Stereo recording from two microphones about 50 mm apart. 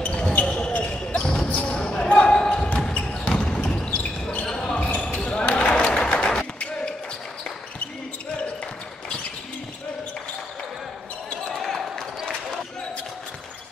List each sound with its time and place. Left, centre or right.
0.0 s basketball bounce: left
1.2 s basketball bounce: centre; by 4.5 s left
4.5 s basketball bounce: centre
5.4 s a sound: left
11.5 s basketball bounce: centre